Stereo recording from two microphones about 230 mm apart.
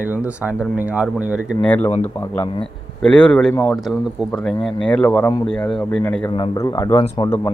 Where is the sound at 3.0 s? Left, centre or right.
Centre.